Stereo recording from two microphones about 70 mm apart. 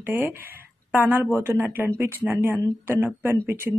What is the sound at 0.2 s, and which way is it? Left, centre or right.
A woman's voice, right.